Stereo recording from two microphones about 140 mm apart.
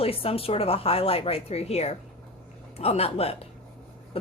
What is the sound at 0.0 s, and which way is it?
A woman's voice, 45° left (ahead or behind).